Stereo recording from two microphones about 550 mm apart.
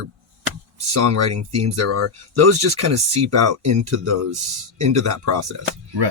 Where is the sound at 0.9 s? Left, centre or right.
Right.